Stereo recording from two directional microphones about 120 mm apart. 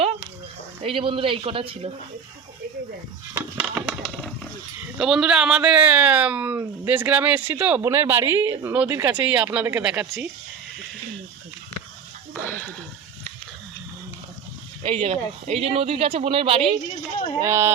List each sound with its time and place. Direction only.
0.8 s a woman's voice: 50° right (ahead or behind)
3.3 s a sound: 10° right (ahead or behind)
4.9 s speech: 5° right (ahead or behind)
7.8 s a woman's voice: 25° right (ahead or behind); by 10.2 s 10° right (ahead or behind)
12.3 s a sound: 15° left (ahead or behind)
15.0 s a woman's voice: 55° right (ahead or behind)
17.4 s a woman's voice: 25° right (ahead or behind)